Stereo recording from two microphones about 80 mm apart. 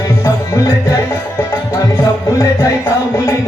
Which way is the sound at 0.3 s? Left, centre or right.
Left.